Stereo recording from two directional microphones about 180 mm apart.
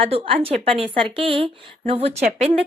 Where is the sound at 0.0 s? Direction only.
35° right (ahead or behind).